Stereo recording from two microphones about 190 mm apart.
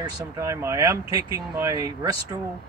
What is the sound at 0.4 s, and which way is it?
Speech, 15° right (ahead or behind).